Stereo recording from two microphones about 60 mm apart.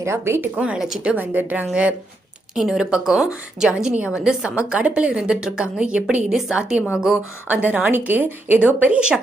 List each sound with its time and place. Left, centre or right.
0.0 s speech: right
0.5 s speech: right
2.6 s a woman's voice: centre
6.2 s a woman's voice: centre
7.4 s a woman's voice: right; by 9.2 s centre